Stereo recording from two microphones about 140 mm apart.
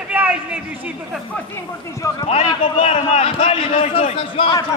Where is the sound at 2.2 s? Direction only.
50° left (ahead or behind).